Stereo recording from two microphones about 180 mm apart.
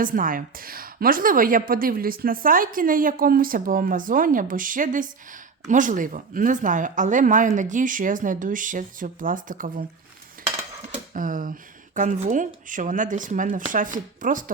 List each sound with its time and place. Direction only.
0.0 s a woman's voice: 50° right (ahead or behind)
11.1 s a woman's voice: 50° right (ahead or behind)